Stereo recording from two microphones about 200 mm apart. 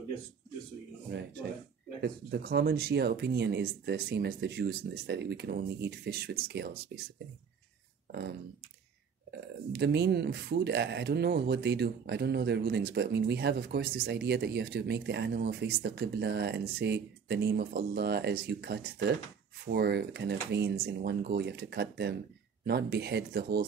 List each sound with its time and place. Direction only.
2.0 s speech: 55° right (ahead or behind)
9.7 s speech: 55° right (ahead or behind)